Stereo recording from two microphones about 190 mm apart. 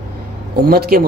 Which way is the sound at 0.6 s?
50° right (ahead or behind).